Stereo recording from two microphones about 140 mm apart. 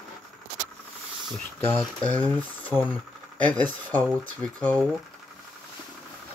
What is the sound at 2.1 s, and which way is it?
Speech, 10° left (ahead or behind).